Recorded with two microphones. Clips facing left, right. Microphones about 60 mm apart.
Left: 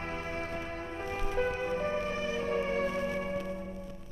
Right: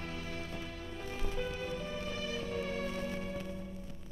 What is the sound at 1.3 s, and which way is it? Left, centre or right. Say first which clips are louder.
Music: left 9 dB; left.